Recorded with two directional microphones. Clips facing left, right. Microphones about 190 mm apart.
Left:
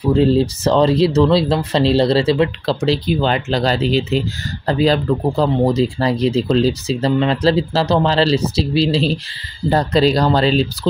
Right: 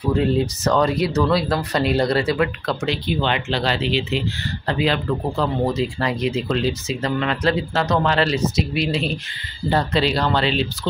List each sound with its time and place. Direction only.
0.1 s speech: 30° left (ahead or behind)